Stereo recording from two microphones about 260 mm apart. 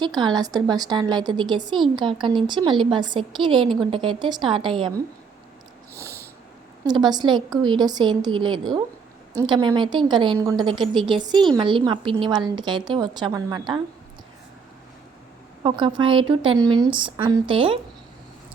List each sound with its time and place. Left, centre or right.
0.0 s a woman's voice: centre
5.9 s snort: centre
6.8 s a woman's voice: centre
15.6 s a woman's voice: centre